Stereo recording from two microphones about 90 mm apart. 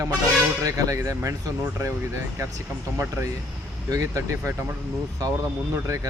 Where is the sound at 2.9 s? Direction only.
30° right (ahead or behind).